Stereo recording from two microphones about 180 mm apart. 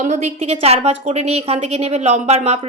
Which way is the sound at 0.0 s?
40° right (ahead or behind).